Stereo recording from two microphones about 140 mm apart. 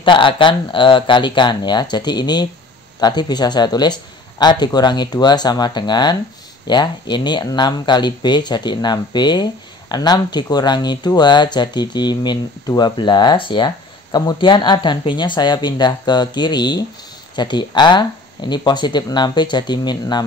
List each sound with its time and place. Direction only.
0.0 s speech: 35° left (ahead or behind)